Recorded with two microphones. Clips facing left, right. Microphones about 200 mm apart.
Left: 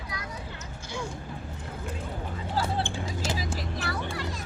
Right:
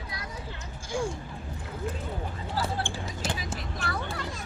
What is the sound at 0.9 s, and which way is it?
Speech, 50° right (ahead or behind).